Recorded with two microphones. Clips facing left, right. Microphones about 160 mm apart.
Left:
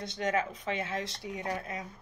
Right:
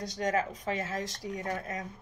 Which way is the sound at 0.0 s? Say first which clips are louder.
Right 1 dB; 40° right (ahead or behind).